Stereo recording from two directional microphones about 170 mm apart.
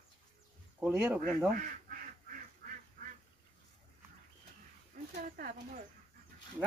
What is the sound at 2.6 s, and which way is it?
Duck, 50° right (ahead or behind).